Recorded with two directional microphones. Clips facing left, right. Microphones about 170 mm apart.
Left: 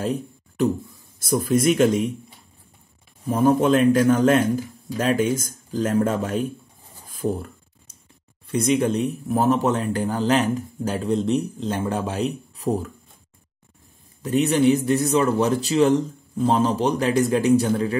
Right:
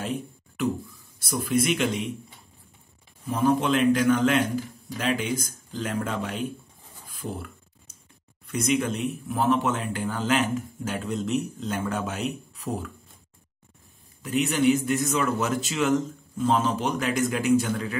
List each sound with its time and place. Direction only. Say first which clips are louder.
0.0 s a sound: left 5 dB; 40° left (ahead or behind)
1.2 s speech: left 6 dB; 45° left (ahead or behind)
3.3 s speech: left 5 dB; 45° left (ahead or behind)
14.2 s speech: left 4 dB; 40° left (ahead or behind)